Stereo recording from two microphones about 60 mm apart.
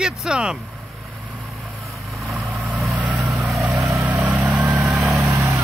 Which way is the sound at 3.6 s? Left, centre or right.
Right.